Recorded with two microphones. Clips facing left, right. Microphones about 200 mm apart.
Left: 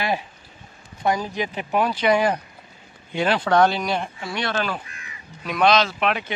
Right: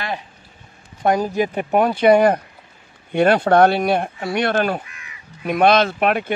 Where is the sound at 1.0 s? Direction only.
50° right (ahead or behind).